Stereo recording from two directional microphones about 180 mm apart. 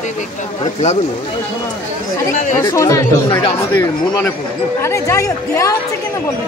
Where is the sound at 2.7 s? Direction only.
15° left (ahead or behind).